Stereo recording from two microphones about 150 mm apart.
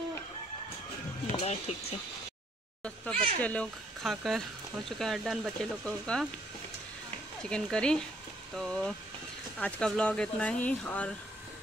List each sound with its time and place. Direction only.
1.2 s speech: 45° left (ahead or behind)
3.3 s speech: 10° left (ahead or behind)
7.4 s speech: 5° left (ahead or behind)